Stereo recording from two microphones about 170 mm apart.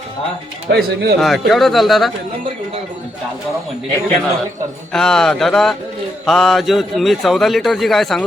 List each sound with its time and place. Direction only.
0.7 s speech: 65° right (ahead or behind)
1.2 s a man's voice: centre (ahead or behind)
4.9 s a man's voice: 5° left (ahead or behind)